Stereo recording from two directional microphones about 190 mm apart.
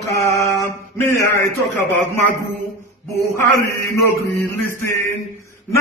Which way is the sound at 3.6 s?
15° left (ahead or behind).